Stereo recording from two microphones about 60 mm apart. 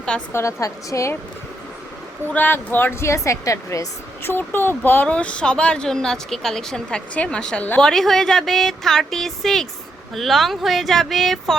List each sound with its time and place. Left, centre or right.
0.3 s a woman's voice: left
2.3 s a woman's voice: left
4.2 s speech: left
5.0 s a woman's voice: centre
7.8 s speech: centre